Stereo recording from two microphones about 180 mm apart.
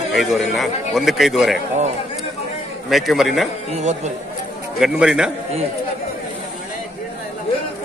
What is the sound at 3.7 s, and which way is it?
Speech, 40° right (ahead or behind).